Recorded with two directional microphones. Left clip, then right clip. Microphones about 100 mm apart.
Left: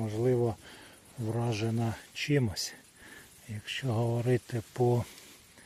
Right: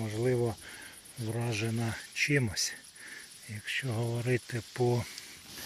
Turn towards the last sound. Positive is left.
turn(degrees=35)  # may be behind; listen again after turning